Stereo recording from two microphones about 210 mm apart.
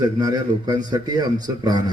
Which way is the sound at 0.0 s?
20° right (ahead or behind).